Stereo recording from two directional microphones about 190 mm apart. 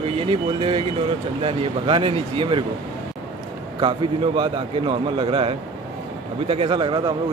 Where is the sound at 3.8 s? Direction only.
25° right (ahead or behind).